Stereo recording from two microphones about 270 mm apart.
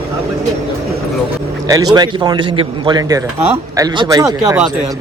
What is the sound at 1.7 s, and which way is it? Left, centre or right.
A man's voice, centre.